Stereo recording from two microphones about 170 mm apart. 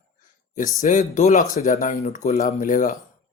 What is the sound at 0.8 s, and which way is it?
Speech, 45° left (ahead or behind).